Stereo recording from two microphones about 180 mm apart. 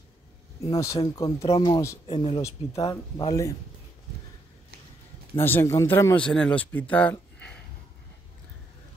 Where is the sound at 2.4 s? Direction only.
15° left (ahead or behind).